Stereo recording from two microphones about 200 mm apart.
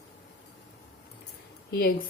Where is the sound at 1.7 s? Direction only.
50° left (ahead or behind).